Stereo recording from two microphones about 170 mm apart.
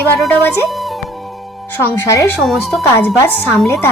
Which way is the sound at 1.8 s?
15° left (ahead or behind).